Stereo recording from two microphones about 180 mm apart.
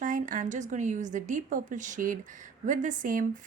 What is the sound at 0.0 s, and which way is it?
Speech, 45° right (ahead or behind).